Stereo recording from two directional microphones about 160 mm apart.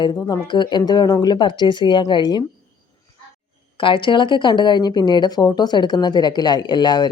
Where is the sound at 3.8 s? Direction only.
30° left (ahead or behind).